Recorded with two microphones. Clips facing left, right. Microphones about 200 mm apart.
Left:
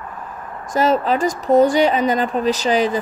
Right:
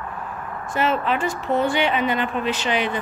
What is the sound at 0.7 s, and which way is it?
Speech, 40° left (ahead or behind).